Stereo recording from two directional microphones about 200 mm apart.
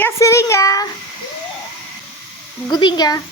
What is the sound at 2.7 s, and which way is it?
Speech, 20° left (ahead or behind).